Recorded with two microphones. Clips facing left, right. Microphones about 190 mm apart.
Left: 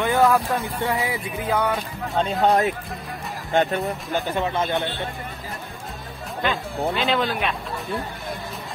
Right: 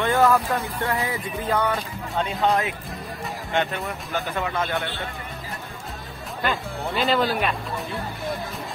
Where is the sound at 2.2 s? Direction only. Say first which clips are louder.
Left 3 dB; 40° left (ahead or behind).